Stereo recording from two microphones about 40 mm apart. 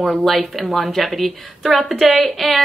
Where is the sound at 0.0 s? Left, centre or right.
Centre.